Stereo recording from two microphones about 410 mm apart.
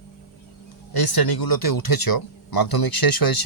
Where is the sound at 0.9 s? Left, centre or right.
Left.